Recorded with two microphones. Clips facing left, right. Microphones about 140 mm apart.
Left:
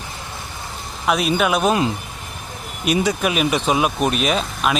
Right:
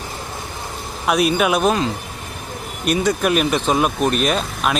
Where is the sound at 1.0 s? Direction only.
Centre (ahead or behind).